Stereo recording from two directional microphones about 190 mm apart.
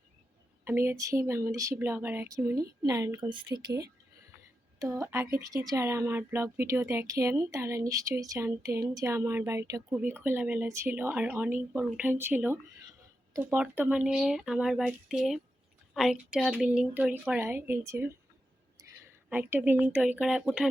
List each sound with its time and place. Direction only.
0.6 s speech: 10° right (ahead or behind)
4.8 s speech: 15° right (ahead or behind)
18.8 s a sound: 20° right (ahead or behind)
19.3 s speech: 10° right (ahead or behind)